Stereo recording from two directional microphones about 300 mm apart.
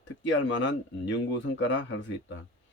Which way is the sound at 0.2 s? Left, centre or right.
Left.